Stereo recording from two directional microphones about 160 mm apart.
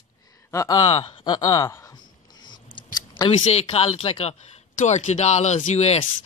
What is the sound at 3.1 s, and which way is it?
Speech, 35° left (ahead or behind).